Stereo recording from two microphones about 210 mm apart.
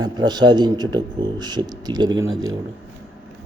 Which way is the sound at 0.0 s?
20° right (ahead or behind).